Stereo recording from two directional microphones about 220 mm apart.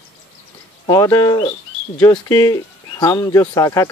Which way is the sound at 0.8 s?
15° left (ahead or behind).